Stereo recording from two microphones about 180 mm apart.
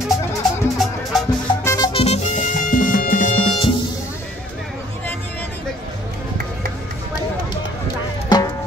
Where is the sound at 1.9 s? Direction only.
35° left (ahead or behind).